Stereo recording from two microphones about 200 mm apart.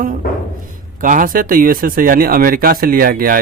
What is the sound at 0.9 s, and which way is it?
A man's voice, 40° right (ahead or behind).